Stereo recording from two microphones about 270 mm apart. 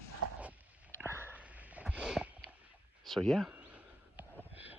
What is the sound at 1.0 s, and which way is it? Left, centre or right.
Sniff, centre.